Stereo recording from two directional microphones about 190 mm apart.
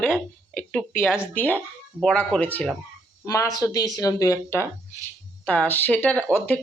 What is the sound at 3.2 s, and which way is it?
Speech, 20° left (ahead or behind).